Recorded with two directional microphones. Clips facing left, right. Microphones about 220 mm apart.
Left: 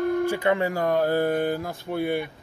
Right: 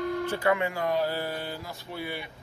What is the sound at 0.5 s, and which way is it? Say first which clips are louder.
Speech: left 5 dB; 40° left (ahead or behind).